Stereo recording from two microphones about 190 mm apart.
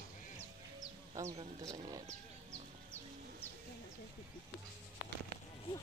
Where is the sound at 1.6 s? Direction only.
20° right (ahead or behind).